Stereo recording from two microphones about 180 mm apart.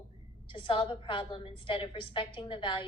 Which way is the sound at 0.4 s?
30° left (ahead or behind).